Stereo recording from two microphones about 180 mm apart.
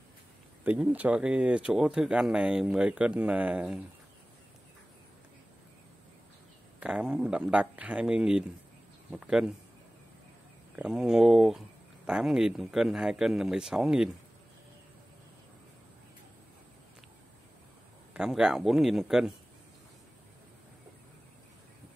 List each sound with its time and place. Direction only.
0.7 s speech: 5° right (ahead or behind)
6.8 s speech: 5° right (ahead or behind)
10.8 s speech: 5° right (ahead or behind)
18.1 s speech: 5° right (ahead or behind)